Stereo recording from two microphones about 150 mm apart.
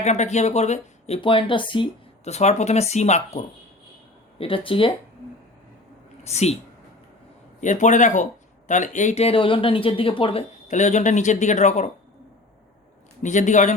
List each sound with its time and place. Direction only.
0.0 s speech: 50° left (ahead or behind); by 1.9 s 35° left (ahead or behind)
2.2 s speech: 45° left (ahead or behind)
4.4 s speech: 35° left (ahead or behind)
6.2 s speech: 45° left (ahead or behind)
7.6 s speech: 55° left (ahead or behind); by 10.4 s 35° left (ahead or behind)
10.7 s speech: 55° left (ahead or behind)
13.2 s speech: 55° left (ahead or behind)